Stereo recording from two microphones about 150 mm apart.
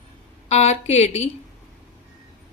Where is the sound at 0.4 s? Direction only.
45° left (ahead or behind).